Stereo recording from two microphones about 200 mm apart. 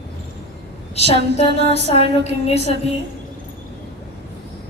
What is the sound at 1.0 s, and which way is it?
Music, 30° left (ahead or behind).